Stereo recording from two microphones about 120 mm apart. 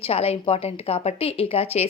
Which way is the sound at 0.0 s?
55° left (ahead or behind).